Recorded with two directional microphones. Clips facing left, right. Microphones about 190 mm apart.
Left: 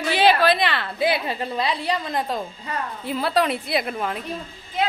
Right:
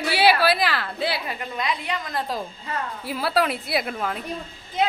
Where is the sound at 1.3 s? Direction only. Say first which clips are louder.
Left 3 dB; 30° left (ahead or behind).